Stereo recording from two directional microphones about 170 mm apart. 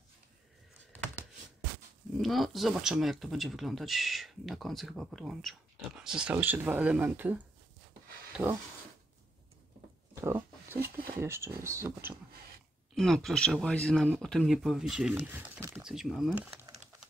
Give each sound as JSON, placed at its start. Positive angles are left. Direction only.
{"t": 2.1, "sound": "speech", "side_deg": 0}
{"t": 10.2, "sound": "a sound", "side_deg": -15}
{"t": 11.1, "sound": "speech", "side_deg": -15}
{"t": 12.9, "sound": "speech", "side_deg": 0}